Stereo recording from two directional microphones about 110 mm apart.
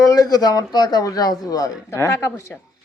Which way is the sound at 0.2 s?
35° left (ahead or behind).